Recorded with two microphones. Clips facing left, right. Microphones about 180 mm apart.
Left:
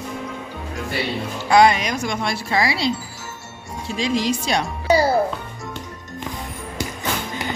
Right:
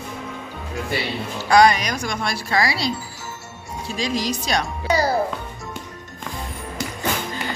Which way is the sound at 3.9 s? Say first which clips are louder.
Left 3 dB; 25° left (ahead or behind).